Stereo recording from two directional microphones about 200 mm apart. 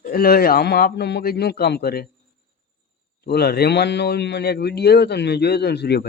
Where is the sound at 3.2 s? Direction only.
55° left (ahead or behind).